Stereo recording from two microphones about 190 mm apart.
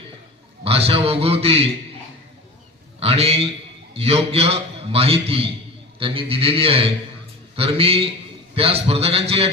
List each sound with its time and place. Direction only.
0.6 s a man's voice: 30° right (ahead or behind)
3.0 s a man's voice: 30° right (ahead or behind)